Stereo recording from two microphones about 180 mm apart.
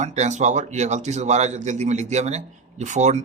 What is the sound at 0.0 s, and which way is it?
Speech, 40° right (ahead or behind).